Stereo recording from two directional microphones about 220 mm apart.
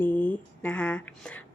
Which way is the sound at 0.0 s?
10° left (ahead or behind).